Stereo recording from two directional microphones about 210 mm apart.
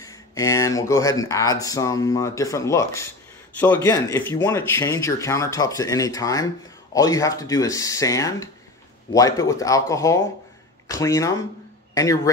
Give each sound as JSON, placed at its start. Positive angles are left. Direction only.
{"t": 0.0, "sound": "speech", "side_deg": 15}